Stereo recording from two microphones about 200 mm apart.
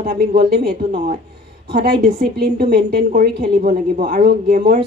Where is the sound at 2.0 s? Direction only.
40° right (ahead or behind).